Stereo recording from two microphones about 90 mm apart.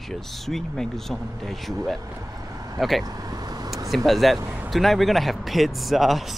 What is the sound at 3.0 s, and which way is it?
Vehicle, 45° right (ahead or behind).